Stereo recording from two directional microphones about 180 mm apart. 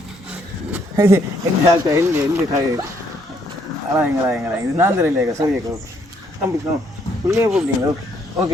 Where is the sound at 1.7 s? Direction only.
20° right (ahead or behind).